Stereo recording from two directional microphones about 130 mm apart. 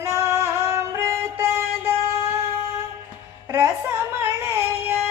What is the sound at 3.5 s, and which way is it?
Music, 15° right (ahead or behind).